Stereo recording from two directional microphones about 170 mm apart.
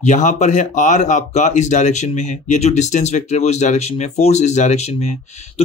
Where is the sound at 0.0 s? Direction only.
45° left (ahead or behind).